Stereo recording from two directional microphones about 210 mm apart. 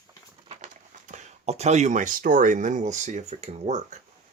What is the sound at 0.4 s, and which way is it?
Speech, 30° right (ahead or behind).